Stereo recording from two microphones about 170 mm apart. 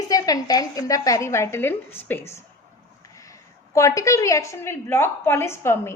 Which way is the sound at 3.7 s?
20° left (ahead or behind).